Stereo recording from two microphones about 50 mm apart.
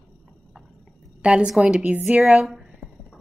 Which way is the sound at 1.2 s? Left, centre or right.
Right.